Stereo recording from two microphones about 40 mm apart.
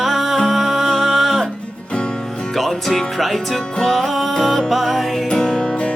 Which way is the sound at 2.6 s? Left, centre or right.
Centre.